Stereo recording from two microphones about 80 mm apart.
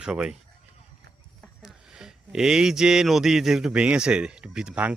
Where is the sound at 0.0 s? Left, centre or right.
Centre.